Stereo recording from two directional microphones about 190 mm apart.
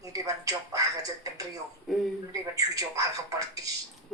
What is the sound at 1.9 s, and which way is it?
Speech, centre (ahead or behind).